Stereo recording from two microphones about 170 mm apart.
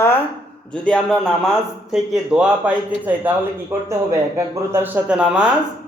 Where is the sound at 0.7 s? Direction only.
5° left (ahead or behind).